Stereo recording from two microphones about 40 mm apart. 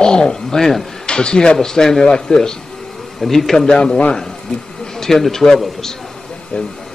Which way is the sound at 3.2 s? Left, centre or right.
Centre.